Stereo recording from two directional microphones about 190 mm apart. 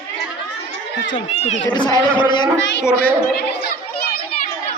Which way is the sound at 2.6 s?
70° left (ahead or behind).